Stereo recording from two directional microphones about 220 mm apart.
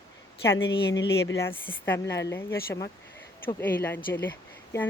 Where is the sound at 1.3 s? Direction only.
10° left (ahead or behind).